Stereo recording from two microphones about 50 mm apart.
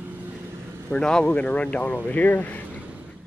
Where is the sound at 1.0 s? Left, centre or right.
Centre.